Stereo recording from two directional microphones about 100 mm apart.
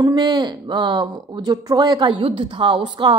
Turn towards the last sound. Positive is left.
turn(degrees=-50)  # may be behind; listen again after turning